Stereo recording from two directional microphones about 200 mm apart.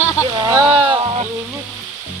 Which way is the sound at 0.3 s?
20° right (ahead or behind).